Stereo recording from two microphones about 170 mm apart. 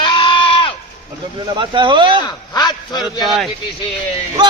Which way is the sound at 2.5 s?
25° left (ahead or behind).